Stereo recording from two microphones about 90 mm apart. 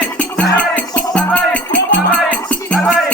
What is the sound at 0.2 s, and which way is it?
Music, 15° left (ahead or behind).